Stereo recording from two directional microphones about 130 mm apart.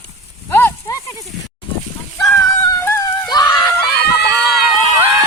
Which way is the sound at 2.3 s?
25° left (ahead or behind).